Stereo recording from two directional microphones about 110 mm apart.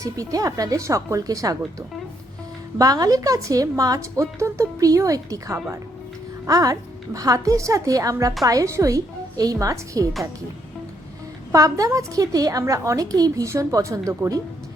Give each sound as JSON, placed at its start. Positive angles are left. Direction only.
{"t": 0.0, "sound": "a woman's voice", "side_deg": -30}
{"t": 2.7, "sound": "a woman's voice", "side_deg": -35}
{"t": 11.5, "sound": "a woman's voice", "side_deg": -30}